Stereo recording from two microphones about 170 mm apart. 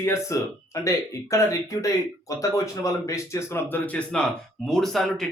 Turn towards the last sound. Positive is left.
turn(degrees=0)  # may be behind; listen again after turning